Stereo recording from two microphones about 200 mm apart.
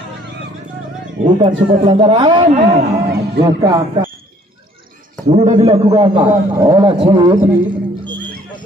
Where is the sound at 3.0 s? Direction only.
55° right (ahead or behind).